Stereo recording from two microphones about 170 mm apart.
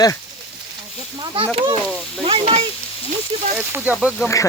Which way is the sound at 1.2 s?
30° right (ahead or behind).